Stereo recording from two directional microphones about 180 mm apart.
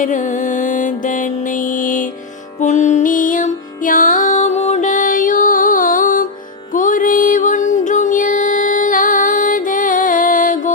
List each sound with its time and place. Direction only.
0.0 s music: 45° left (ahead or behind)